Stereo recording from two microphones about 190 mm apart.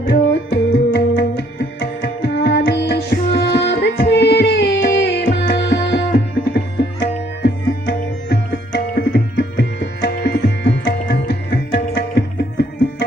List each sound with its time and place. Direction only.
0.1 s music: 70° left (ahead or behind)
9.0 s tabla: 65° left (ahead or behind)